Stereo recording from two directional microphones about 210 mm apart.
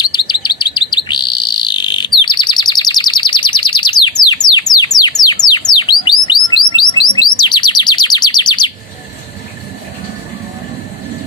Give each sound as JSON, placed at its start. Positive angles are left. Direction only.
{"t": 0.0, "sound": "chirp", "side_deg": 20}
{"t": 5.2, "sound": "bird", "side_deg": 20}